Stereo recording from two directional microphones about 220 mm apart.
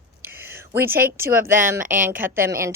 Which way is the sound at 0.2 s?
10° right (ahead or behind).